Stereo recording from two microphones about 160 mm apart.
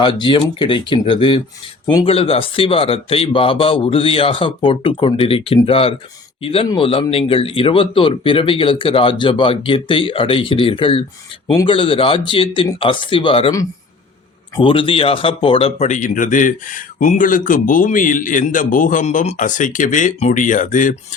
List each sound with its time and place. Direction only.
0.0 s speech: 30° left (ahead or behind)
14.6 s speech: 35° left (ahead or behind)
15.9 s speech: 55° left (ahead or behind)